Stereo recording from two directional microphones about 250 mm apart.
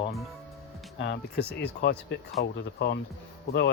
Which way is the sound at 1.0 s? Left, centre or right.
Left.